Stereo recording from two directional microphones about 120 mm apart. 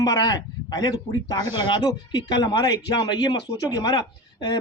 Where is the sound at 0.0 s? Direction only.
30° left (ahead or behind).